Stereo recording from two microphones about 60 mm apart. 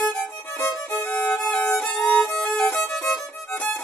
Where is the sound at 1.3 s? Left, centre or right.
Centre.